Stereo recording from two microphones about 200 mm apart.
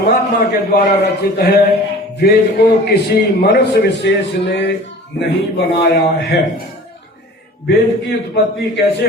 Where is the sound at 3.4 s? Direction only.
60° left (ahead or behind).